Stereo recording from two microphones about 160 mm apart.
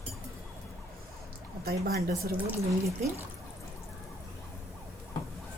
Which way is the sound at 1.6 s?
70° right (ahead or behind).